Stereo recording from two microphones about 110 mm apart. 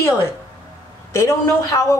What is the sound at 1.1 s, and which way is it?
Speech, 25° left (ahead or behind).